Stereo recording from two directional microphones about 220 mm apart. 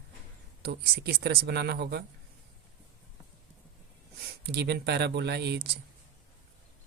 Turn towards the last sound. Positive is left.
turn(degrees=-45)  # may be behind; listen again after turning